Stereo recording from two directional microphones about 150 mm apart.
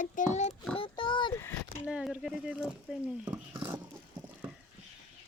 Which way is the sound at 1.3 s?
15° left (ahead or behind).